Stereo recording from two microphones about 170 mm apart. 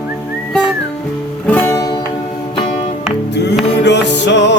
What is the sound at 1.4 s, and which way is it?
Music, 10° left (ahead or behind).